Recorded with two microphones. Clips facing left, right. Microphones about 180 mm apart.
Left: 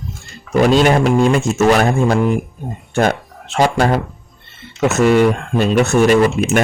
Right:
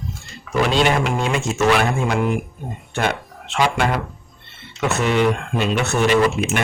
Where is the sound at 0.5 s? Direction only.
45° left (ahead or behind).